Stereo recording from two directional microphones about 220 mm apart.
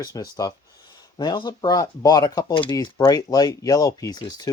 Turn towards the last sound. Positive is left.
turn(degrees=20)  # may be behind; listen again after turning